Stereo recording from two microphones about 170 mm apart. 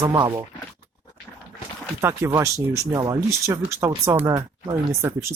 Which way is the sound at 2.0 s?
15° right (ahead or behind).